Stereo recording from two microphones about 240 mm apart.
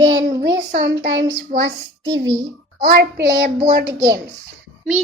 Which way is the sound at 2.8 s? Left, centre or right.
Right.